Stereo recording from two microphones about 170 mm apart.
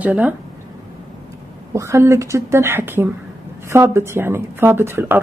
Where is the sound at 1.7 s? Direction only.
15° right (ahead or behind).